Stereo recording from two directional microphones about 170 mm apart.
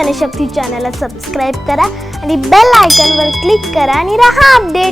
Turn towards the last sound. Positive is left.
turn(degrees=0)  # may be behind; listen again after turning